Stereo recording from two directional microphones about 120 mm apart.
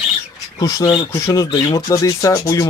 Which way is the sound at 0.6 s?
30° left (ahead or behind).